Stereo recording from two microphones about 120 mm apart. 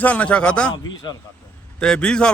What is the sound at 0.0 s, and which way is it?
Speech, 10° left (ahead or behind).